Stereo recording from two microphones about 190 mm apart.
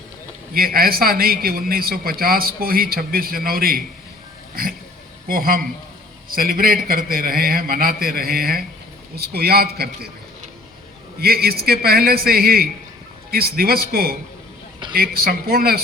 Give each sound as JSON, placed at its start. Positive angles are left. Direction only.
{"t": 0.5, "sound": "a man's voice", "side_deg": -50}
{"t": 5.3, "sound": "a man's voice", "side_deg": -50}
{"t": 11.2, "sound": "a man's voice", "side_deg": -55}